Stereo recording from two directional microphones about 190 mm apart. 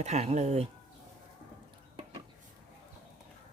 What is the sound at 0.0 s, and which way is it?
Speech, 35° right (ahead or behind).